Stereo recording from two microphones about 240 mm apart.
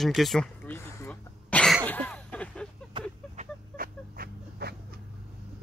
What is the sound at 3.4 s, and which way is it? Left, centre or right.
Vehicle, right.